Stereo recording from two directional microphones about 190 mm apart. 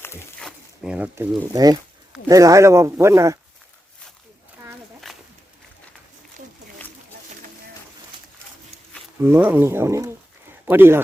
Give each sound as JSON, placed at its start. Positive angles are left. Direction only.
{"t": 0.3, "sound": "speech", "side_deg": 0}
{"t": 5.1, "sound": "a sound", "side_deg": 0}
{"t": 9.2, "sound": "speech", "side_deg": -10}